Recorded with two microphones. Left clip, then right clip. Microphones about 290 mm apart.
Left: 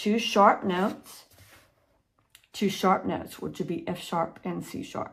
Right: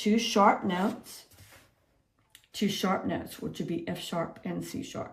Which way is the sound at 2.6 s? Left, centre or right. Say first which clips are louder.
Left 5 dB; centre.